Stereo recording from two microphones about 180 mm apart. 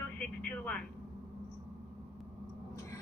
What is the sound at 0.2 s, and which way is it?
Vehicle, 5° left (ahead or behind).